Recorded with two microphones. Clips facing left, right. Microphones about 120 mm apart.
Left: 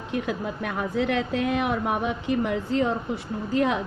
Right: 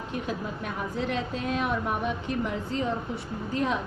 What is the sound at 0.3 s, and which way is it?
A woman's voice, 75° left (ahead or behind).